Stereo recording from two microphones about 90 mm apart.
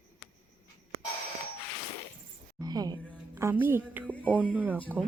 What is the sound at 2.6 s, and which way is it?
Music, 45° right (ahead or behind).